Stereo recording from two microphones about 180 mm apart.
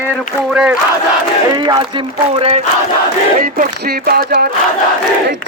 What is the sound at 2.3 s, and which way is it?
Battle cry, 35° right (ahead or behind).